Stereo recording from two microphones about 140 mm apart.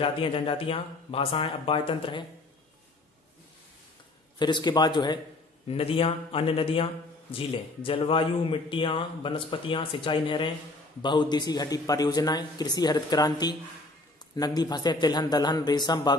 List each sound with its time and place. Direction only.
0.0 s a man's voice: 40° left (ahead or behind)
4.4 s a man's voice: 30° left (ahead or behind)
5.7 s a man's voice: 40° left (ahead or behind)